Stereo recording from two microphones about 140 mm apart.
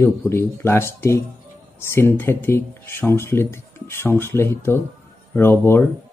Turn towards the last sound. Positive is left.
turn(degrees=15)  # may be behind; listen again after turning